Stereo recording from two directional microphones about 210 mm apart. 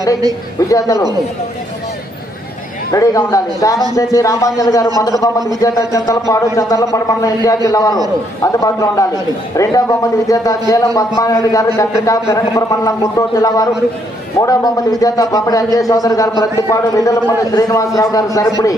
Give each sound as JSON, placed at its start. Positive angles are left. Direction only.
{"t": 0.7, "sound": "a man's voice", "side_deg": 15}
{"t": 2.9, "sound": "a man's voice", "side_deg": 15}